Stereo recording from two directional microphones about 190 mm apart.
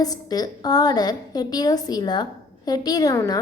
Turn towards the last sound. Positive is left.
turn(degrees=20)  # may be behind; listen again after turning